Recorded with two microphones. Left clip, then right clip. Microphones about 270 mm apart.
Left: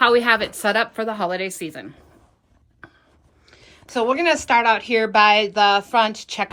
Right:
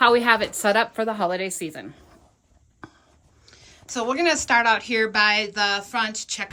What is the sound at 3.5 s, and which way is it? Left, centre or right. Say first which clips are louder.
Speech: left 6 dB; centre.